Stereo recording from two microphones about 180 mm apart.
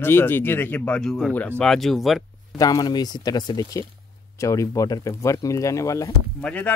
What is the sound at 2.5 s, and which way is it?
Speech, 20° left (ahead or behind).